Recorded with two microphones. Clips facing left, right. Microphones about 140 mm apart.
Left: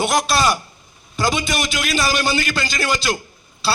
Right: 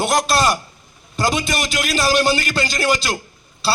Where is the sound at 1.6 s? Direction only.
35° right (ahead or behind).